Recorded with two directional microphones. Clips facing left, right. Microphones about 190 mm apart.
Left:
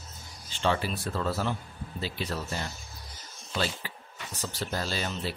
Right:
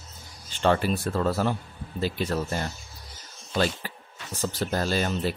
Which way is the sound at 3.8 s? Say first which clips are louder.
Right 3 dB; 45° right (ahead or behind).